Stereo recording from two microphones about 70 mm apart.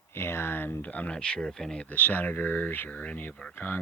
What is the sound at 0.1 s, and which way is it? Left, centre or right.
Speech, left.